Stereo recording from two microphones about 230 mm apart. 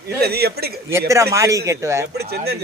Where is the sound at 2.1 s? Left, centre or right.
Right.